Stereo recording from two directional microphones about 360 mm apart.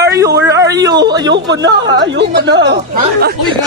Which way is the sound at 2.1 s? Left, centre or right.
Right.